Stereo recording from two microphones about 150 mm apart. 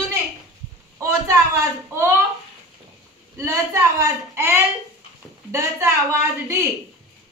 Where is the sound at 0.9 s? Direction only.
20° right (ahead or behind).